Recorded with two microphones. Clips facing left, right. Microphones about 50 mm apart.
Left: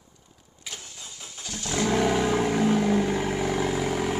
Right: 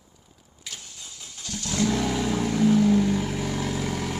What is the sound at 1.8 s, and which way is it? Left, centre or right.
Vehicle, left.